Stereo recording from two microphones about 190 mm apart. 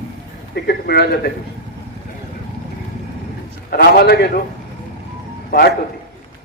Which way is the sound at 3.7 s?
55° left (ahead or behind).